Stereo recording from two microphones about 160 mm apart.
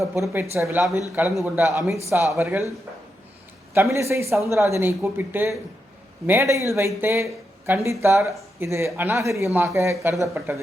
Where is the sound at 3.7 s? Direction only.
20° right (ahead or behind).